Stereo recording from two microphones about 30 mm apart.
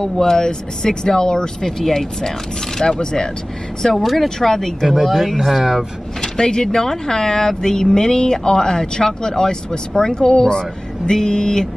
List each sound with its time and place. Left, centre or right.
0.0 s speech: centre
2.8 s speech: left
3.9 s speech: centre
4.4 s speech: centre
5.3 s speech: centre
5.6 s speech: centre
6.2 s speech: left